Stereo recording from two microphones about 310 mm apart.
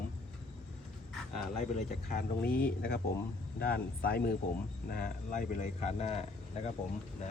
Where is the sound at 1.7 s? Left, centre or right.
Left.